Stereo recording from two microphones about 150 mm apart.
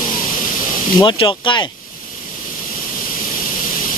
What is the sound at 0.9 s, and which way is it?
Speech, 30° left (ahead or behind).